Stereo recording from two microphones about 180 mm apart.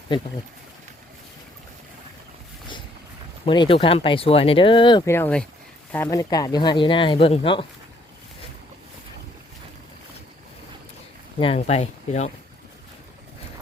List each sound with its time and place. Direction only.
3.4 s speech: 25° left (ahead or behind)
5.0 s speech: 10° left (ahead or behind); by 7.7 s 30° left (ahead or behind)
11.3 s speech: 35° left (ahead or behind)